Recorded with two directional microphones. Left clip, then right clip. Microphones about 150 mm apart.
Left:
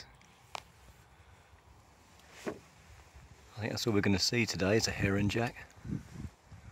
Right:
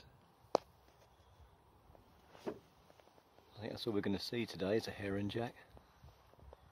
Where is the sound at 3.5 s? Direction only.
10° left (ahead or behind).